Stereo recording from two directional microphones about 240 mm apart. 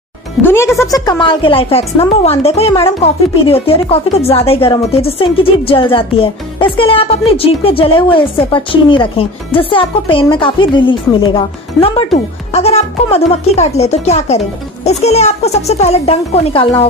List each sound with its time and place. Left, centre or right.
0.4 s speech: centre; by 16.6 s left